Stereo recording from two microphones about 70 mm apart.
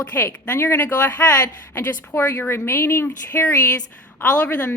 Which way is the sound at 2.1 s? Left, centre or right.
Left.